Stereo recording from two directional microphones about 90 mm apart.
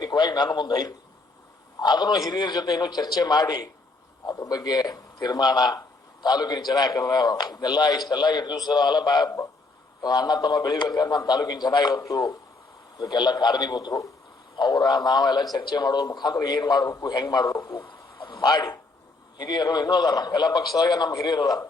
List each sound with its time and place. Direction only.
0.0 s a man's voice: 50° left (ahead or behind)
11.9 s a man's voice: 40° left (ahead or behind)
17.7 s a sound: 60° left (ahead or behind)
18.3 s a man's voice: 50° left (ahead or behind)